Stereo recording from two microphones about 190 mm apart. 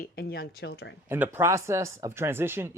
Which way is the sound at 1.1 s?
10° right (ahead or behind).